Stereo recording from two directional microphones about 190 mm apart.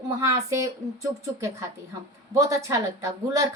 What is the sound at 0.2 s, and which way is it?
Speech, 15° right (ahead or behind).